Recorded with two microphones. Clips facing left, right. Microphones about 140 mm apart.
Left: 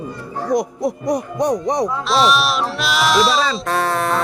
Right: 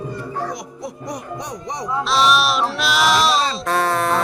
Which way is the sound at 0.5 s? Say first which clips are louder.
Left 12 dB; 40° left (ahead or behind).